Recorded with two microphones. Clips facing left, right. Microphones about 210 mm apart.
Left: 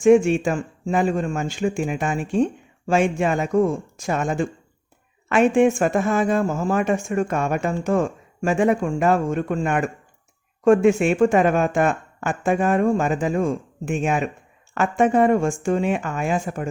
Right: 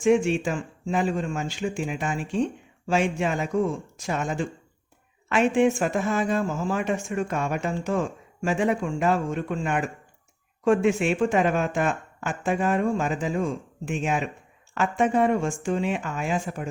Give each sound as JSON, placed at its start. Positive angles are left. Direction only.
{"t": 0.0, "sound": "speech", "side_deg": 50}